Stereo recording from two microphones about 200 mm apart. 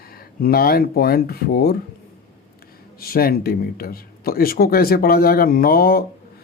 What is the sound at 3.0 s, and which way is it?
Speech, 50° left (ahead or behind).